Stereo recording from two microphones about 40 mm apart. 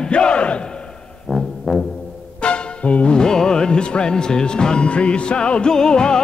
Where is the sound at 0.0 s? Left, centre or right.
Left.